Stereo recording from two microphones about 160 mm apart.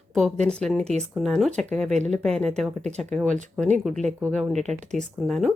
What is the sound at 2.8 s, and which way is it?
Speech, 45° right (ahead or behind).